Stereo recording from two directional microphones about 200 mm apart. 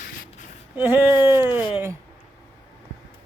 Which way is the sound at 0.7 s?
10° right (ahead or behind).